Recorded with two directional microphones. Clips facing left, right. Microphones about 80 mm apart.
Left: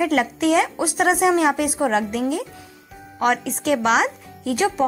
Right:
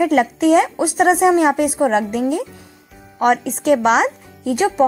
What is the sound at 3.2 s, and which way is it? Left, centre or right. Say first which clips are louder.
Speech: right 4 dB; right.